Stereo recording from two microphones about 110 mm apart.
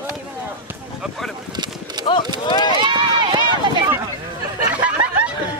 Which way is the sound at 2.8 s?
45° right (ahead or behind).